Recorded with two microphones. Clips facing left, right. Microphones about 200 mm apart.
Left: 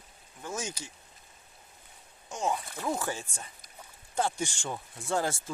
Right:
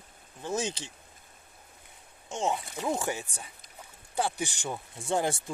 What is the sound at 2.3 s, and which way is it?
Speech, 25° right (ahead or behind).